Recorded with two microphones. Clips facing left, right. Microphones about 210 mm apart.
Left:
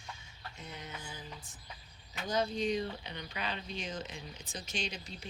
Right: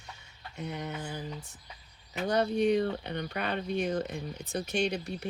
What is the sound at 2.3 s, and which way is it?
Speech, 65° right (ahead or behind).